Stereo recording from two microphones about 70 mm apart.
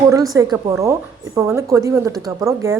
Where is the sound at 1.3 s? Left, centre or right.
Right.